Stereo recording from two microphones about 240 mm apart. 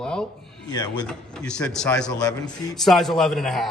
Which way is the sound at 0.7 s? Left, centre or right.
Centre.